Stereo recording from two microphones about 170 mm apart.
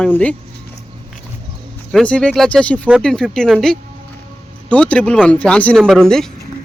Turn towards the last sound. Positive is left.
turn(degrees=5)  # may be behind; listen again after turning